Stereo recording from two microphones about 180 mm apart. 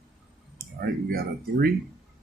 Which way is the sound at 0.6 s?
55° right (ahead or behind).